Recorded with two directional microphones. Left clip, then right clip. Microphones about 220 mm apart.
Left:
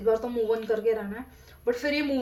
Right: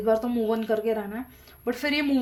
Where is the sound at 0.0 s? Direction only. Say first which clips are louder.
Right 1 dB; 45° right (ahead or behind).